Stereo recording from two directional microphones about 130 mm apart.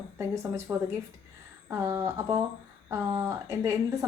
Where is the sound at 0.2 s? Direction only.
20° right (ahead or behind).